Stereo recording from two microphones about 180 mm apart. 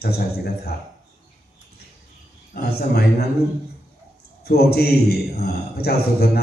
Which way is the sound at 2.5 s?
60° left (ahead or behind).